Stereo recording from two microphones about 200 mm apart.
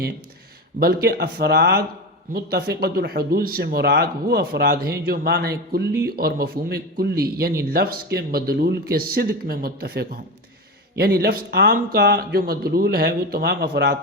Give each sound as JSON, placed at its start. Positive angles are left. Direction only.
{"t": 0.8, "sound": "speech", "side_deg": -50}